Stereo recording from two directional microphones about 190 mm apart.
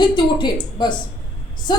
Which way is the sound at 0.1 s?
25° left (ahead or behind).